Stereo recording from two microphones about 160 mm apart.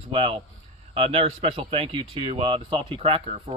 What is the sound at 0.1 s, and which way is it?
Speech, 40° right (ahead or behind).